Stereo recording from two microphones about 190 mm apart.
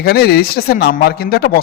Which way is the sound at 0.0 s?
55° left (ahead or behind).